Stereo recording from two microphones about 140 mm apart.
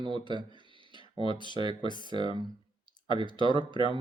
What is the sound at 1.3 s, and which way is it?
Speech, 35° left (ahead or behind).